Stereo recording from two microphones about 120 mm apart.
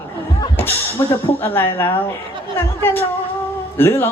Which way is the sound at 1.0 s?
30° left (ahead or behind).